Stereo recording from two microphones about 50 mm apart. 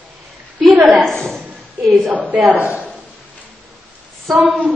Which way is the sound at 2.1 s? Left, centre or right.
Right.